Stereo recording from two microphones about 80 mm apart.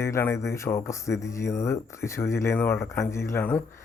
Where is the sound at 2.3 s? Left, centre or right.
Left.